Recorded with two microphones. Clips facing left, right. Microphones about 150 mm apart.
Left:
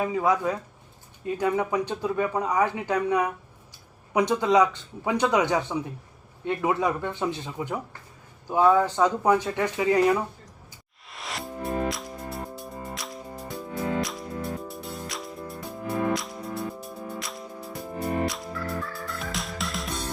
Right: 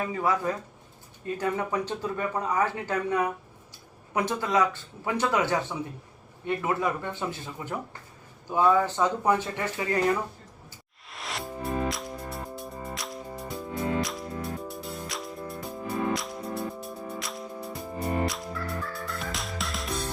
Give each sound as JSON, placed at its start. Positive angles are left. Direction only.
{"t": 0.0, "sound": "speech", "side_deg": 15}
{"t": 11.1, "sound": "music", "side_deg": 0}